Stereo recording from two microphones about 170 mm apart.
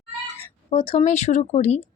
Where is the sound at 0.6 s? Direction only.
30° left (ahead or behind).